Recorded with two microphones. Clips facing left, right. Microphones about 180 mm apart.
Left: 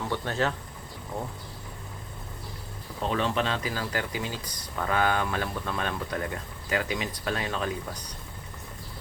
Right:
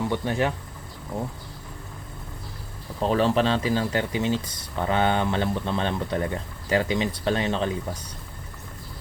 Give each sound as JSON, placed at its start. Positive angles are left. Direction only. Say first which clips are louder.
{"t": 0.1, "sound": "speech", "louder": "right 4 dB", "side_deg": -15}
{"t": 3.1, "sound": "speech", "louder": "right 6 dB", "side_deg": -35}